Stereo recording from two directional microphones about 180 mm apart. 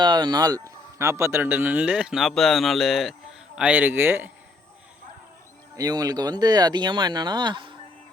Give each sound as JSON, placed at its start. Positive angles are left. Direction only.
{"t": 0.0, "sound": "speech", "side_deg": -25}
{"t": 5.7, "sound": "speech", "side_deg": -20}